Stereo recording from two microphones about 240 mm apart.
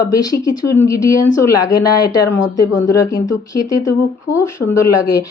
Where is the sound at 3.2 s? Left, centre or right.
Left.